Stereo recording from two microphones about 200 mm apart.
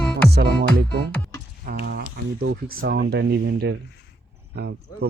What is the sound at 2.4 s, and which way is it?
Speech, 85° right.